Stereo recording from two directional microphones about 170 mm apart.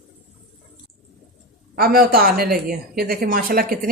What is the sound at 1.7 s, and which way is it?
Speech, 60° right (ahead or behind).